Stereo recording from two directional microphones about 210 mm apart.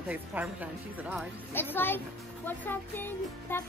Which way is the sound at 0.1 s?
5° right (ahead or behind).